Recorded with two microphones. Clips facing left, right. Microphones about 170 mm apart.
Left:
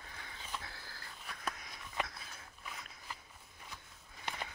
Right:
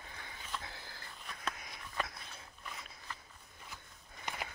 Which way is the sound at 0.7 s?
20° right (ahead or behind).